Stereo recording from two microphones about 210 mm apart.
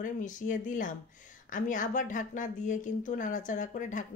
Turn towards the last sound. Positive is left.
turn(degrees=35)  # may be behind; listen again after turning